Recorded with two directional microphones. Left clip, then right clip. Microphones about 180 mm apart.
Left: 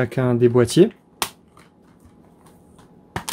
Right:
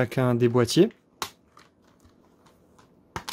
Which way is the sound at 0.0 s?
25° right (ahead or behind).